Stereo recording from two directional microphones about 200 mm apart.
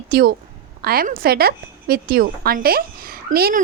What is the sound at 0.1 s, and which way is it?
A woman's voice, 50° right (ahead or behind).